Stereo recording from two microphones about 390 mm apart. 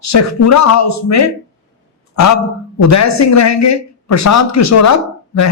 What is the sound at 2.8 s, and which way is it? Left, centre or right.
A man's voice, left.